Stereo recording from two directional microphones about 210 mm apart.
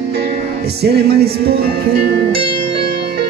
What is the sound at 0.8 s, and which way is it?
Music, 50° right (ahead or behind).